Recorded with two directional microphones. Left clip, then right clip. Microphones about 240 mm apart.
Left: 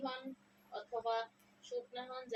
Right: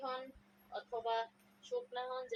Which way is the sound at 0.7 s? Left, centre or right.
Centre.